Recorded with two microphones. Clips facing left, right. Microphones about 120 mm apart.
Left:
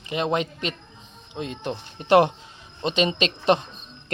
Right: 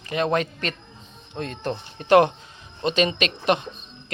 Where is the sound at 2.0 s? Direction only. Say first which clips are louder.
Right 1 dB; 25° left (ahead or behind).